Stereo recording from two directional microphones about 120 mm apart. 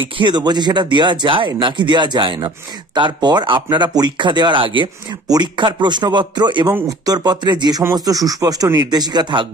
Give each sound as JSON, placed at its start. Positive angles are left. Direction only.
{"t": 0.2, "sound": "speech", "side_deg": -35}